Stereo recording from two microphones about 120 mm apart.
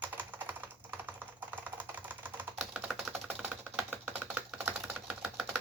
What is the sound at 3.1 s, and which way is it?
Typewriter, 15° right (ahead or behind).